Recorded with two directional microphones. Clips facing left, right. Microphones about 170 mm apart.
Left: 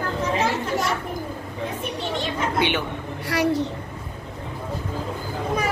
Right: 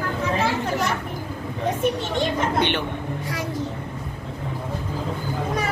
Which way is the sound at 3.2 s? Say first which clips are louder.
Left 11 dB; 70° left (ahead or behind).